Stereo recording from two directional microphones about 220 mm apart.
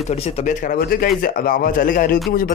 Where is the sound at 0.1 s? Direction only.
30° left (ahead or behind).